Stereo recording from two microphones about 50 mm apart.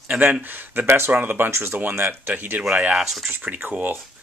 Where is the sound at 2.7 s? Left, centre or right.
Centre.